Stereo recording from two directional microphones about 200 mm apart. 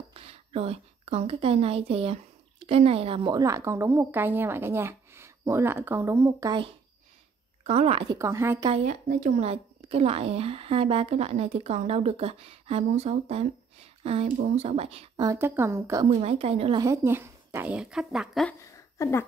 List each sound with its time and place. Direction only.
0.1 s a woman's voice: 30° right (ahead or behind); by 6.6 s 15° right (ahead or behind)
7.6 s a woman's voice: 30° right (ahead or behind)
8.2 s a woman's voice: 15° right (ahead or behind)
8.6 s a woman's voice: 35° right (ahead or behind)
15.2 s a woman's voice: 10° right (ahead or behind)
16.1 s a woman's voice: 30° right (ahead or behind)
16.8 s a woman's voice: 15° right (ahead or behind)
18.9 s speech: 10° left (ahead or behind)